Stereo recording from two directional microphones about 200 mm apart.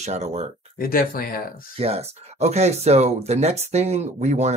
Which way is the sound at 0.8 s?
45° left (ahead or behind).